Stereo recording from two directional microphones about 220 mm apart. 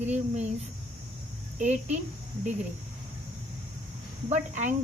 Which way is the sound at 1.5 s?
35° right (ahead or behind).